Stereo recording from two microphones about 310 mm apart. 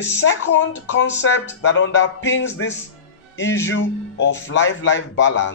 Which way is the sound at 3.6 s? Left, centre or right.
Left.